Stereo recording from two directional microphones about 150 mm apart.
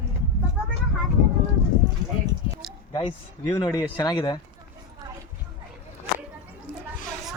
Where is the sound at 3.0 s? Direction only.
35° left (ahead or behind).